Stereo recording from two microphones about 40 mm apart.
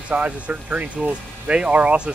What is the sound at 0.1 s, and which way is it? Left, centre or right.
Speech, right.